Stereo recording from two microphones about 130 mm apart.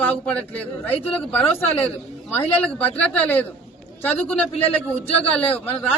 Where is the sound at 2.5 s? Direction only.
10° left (ahead or behind).